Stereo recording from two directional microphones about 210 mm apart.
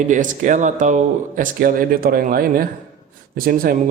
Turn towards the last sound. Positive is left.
turn(degrees=-45)  # may be behind; listen again after turning